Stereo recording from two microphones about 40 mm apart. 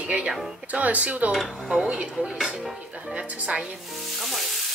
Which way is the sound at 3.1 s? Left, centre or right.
Right.